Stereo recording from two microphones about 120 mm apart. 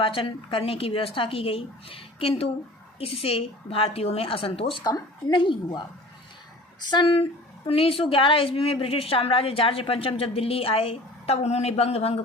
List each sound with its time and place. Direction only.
0.0 s a woman's voice: 50° left (ahead or behind)
4.8 s a woman's voice: 35° left (ahead or behind)
6.9 s a woman's voice: 45° left (ahead or behind)